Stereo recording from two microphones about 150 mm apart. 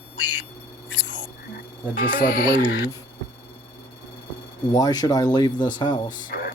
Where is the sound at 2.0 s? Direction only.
70° left (ahead or behind).